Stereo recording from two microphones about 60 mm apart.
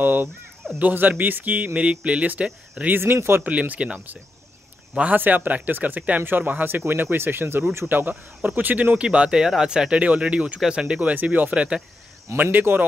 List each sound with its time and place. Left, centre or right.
0.0 s speech: right
2.9 s speech: right
3.4 s speech: right
12.4 s speech: right